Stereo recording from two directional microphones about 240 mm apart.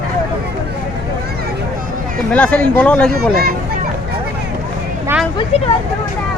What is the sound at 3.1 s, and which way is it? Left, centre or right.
Speech, right.